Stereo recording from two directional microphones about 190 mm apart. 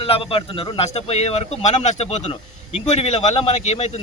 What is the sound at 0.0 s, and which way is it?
Speech, 30° left (ahead or behind).